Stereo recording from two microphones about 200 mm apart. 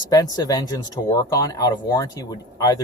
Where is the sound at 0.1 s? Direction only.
20° left (ahead or behind).